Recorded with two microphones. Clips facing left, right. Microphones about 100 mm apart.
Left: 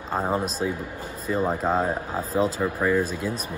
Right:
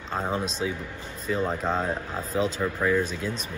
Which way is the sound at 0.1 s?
5° left (ahead or behind).